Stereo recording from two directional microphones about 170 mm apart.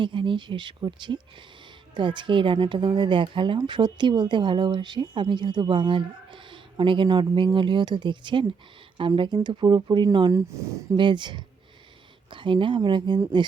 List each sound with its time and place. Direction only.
0.0 s speech: 30° right (ahead or behind)